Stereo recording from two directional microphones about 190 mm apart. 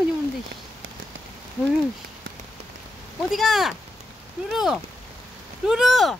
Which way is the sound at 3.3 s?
Centre (ahead or behind).